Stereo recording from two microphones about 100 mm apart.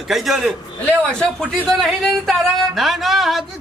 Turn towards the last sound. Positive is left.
turn(degrees=0)  # may be behind; listen again after turning